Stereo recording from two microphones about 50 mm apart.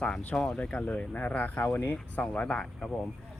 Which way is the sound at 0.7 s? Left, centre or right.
Left.